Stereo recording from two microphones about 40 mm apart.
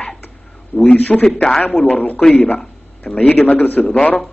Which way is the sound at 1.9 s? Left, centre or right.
Left.